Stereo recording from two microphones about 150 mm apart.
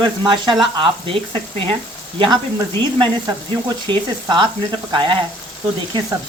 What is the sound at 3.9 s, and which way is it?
Speech, 30° right (ahead or behind).